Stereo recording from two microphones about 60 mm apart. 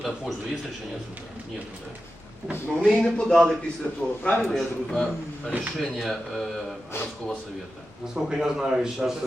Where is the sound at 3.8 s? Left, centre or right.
Left.